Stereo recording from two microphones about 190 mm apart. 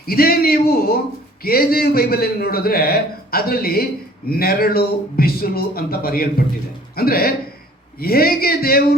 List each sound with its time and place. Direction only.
0.0 s a man's voice: 50° left (ahead or behind)